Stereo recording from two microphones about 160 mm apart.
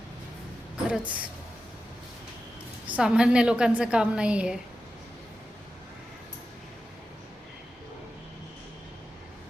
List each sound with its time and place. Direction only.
0.9 s speech: 10° right (ahead or behind)
2.8 s a woman's voice: 5° right (ahead or behind)